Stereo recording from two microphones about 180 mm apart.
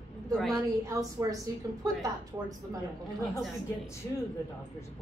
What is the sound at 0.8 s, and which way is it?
A woman's voice, 20° right (ahead or behind).